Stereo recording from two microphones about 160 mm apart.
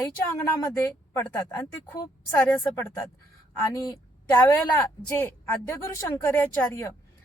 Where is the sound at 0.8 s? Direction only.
15° left (ahead or behind).